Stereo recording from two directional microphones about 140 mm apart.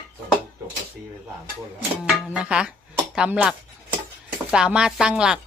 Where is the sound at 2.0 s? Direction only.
10° right (ahead or behind).